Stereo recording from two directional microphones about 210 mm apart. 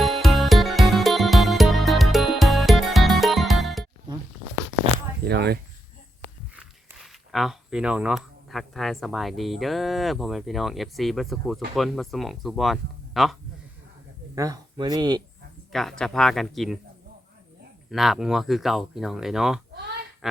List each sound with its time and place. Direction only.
0.0 s music: centre (ahead or behind)
5.2 s speech: 50° right (ahead or behind)
6.6 s speech: centre (ahead or behind)
14.3 s speech: 15° right (ahead or behind)
15.7 s speech: centre (ahead or behind)
17.9 s speech: centre (ahead or behind)